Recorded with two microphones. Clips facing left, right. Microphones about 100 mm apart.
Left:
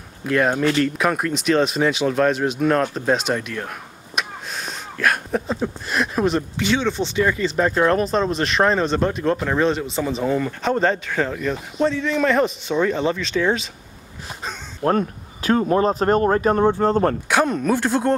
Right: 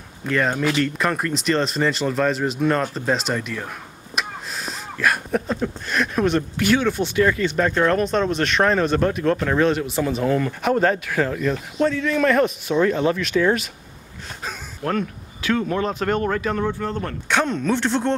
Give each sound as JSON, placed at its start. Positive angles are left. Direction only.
{"t": 0.3, "sound": "speech", "side_deg": 5}
{"t": 14.8, "sound": "speech", "side_deg": 35}
{"t": 17.3, "sound": "speech", "side_deg": 5}